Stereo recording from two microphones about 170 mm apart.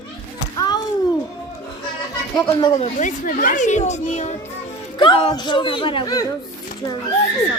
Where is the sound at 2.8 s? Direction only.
45° left (ahead or behind).